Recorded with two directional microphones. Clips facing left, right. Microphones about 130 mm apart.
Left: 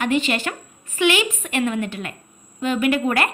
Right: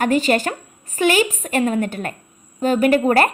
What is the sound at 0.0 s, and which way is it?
A woman's voice, 40° right (ahead or behind).